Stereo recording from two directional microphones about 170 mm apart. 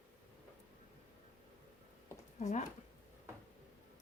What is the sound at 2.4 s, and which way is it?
Speech, 45° left (ahead or behind).